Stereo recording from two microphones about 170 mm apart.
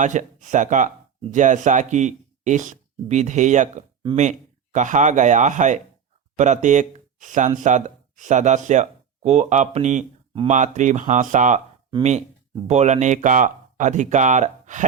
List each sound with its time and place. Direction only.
0.0 s speech: 45° right (ahead or behind)
12.6 s speech: 40° right (ahead or behind)